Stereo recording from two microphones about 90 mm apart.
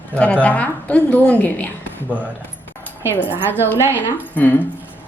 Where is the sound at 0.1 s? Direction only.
15° left (ahead or behind).